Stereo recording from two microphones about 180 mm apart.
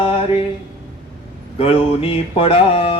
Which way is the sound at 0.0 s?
30° left (ahead or behind).